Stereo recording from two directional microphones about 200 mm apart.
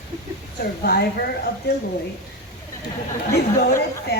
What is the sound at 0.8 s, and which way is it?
Speech, 50° left (ahead or behind).